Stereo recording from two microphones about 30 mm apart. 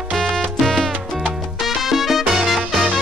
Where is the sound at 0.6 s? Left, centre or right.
Centre.